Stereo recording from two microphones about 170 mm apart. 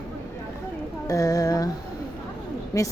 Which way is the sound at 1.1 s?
20° left (ahead or behind).